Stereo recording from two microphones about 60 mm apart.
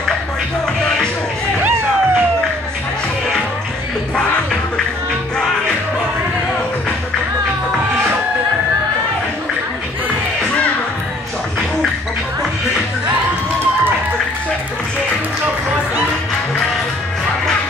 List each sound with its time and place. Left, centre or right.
1.6 s vehicle: right